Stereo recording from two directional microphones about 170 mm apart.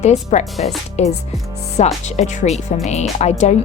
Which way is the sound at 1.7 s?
40° left (ahead or behind).